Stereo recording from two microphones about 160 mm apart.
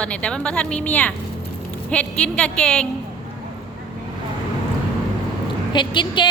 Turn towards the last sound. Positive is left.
turn(degrees=30)  # may be behind; listen again after turning